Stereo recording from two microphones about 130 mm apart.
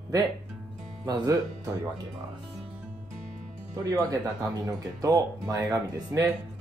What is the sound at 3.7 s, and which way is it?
Speech, 25° right (ahead or behind).